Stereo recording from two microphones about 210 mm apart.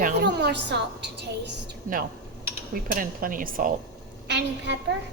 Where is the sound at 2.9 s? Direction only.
40° right (ahead or behind).